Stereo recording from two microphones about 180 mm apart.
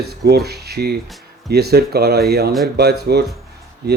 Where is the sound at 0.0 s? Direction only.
60° right (ahead or behind).